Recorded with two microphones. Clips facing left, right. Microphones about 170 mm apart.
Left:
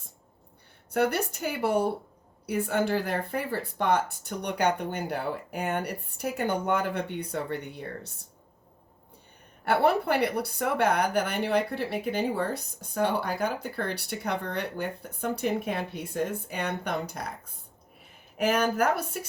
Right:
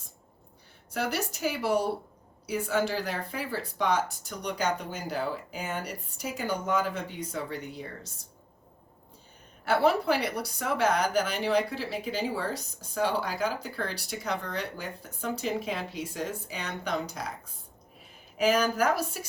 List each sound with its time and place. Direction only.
0.9 s speech: 55° left (ahead or behind)
9.6 s speech: 60° left (ahead or behind)